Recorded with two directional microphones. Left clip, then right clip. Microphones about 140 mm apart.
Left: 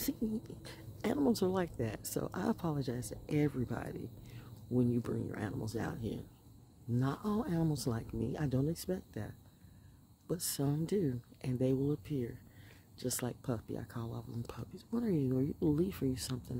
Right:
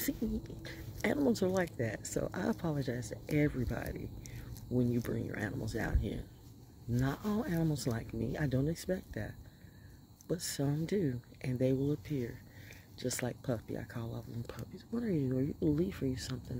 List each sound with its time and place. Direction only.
0.0 s speech: 25° left (ahead or behind)